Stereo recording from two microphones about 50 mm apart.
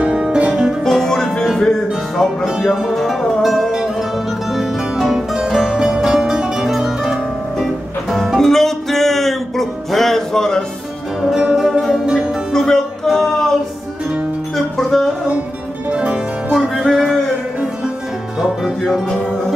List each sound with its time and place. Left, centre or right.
0.0 s music: centre
0.8 s music: centre
2.1 s music: centre
11.3 s music: centre
12.5 s music: centre
14.8 s music: centre
15.9 s music: right
18.4 s music: centre